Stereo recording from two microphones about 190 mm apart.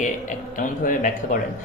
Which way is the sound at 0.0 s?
40° left (ahead or behind).